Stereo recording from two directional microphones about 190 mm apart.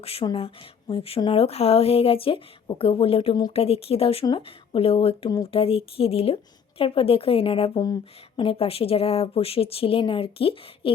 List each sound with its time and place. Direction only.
0.0 s a woman's voice: 30° left (ahead or behind)